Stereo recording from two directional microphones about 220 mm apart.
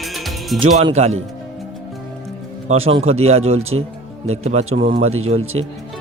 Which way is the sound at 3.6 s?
70° right (ahead or behind).